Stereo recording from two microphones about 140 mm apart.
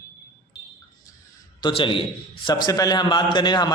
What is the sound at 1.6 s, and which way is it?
A man's voice, 40° left (ahead or behind).